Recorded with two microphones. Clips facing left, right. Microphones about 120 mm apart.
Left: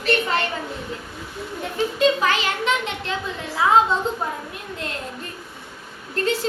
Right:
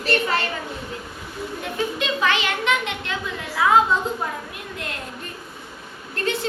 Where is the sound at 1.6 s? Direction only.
35° left (ahead or behind).